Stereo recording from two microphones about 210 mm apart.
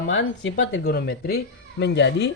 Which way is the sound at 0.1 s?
60° left (ahead or behind).